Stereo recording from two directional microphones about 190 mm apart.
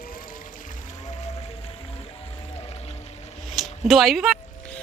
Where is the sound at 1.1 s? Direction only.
35° left (ahead or behind).